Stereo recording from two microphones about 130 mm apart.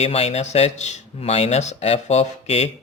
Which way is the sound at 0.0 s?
50° left (ahead or behind).